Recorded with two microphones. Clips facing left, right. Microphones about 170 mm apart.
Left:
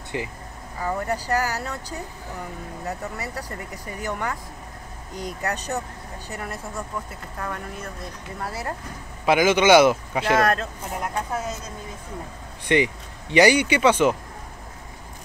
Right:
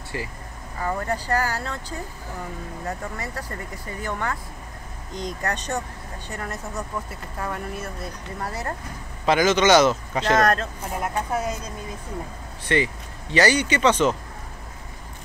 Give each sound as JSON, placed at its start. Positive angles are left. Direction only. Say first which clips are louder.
{"t": 0.1, "sound": "a man's voice", "louder": "left 2 dB", "side_deg": 20}
{"t": 7.3, "sound": "speech", "louder": "right 2 dB", "side_deg": -10}
{"t": 8.5, "sound": "a man's voice", "louder": "even", "side_deg": 5}
{"t": 12.6, "sound": "a man's voice", "louder": "left 2 dB", "side_deg": 15}